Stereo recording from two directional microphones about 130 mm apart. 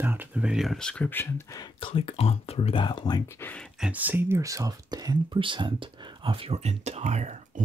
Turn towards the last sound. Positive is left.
turn(degrees=-60)  # may be behind; listen again after turning